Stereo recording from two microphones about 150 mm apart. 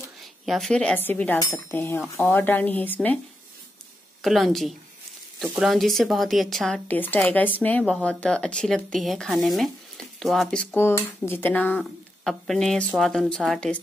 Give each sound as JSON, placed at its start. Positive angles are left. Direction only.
{"t": 0.2, "sound": "speech", "side_deg": 0}
{"t": 4.2, "sound": "speech", "side_deg": 0}
{"t": 11.8, "sound": "speech", "side_deg": 0}